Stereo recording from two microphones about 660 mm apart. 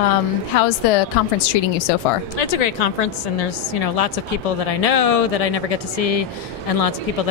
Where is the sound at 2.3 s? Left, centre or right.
Left.